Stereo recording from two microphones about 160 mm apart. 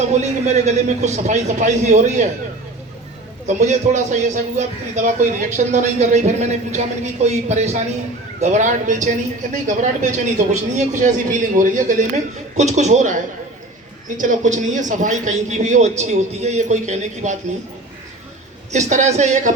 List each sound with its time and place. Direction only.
0.1 s a man's voice: 45° right (ahead or behind)
3.4 s a man's voice: 50° right (ahead or behind)
14.2 s a man's voice: 50° right (ahead or behind)
18.7 s a man's voice: 50° right (ahead or behind)